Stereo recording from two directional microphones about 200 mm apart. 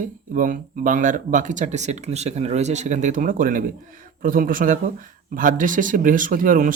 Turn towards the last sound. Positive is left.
turn(degrees=-45)  # may be behind; listen again after turning